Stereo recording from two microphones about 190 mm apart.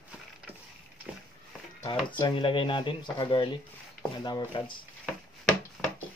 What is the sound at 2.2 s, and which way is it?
Speech, 25° left (ahead or behind).